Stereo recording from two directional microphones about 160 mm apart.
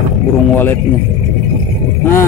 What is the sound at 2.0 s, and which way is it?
Speech, 15° left (ahead or behind).